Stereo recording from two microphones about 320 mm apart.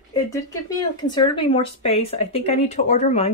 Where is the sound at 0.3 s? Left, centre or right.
Centre.